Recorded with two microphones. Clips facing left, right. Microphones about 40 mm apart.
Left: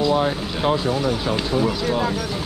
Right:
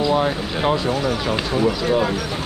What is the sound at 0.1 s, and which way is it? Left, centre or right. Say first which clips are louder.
Speech: right 1 dB; right.